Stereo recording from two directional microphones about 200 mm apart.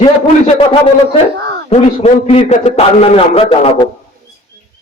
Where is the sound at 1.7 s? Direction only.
30° left (ahead or behind).